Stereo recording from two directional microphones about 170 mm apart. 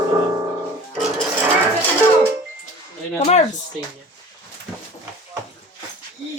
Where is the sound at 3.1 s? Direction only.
40° left (ahead or behind).